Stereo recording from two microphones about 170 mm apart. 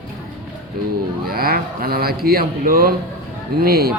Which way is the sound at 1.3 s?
60° right (ahead or behind).